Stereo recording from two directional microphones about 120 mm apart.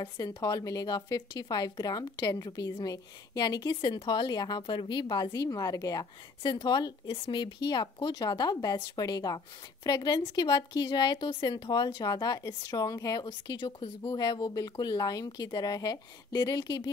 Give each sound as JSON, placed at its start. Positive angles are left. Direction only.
{"t": 0.0, "sound": "a woman's voice", "side_deg": 35}